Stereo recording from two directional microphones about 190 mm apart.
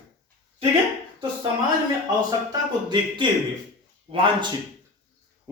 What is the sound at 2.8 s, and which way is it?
Speech, 25° right (ahead or behind).